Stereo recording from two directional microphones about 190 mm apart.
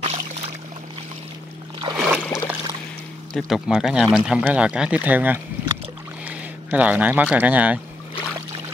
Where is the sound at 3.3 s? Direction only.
Centre (ahead or behind).